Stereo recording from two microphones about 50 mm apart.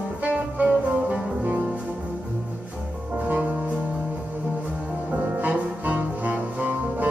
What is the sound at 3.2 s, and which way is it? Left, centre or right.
Music, right.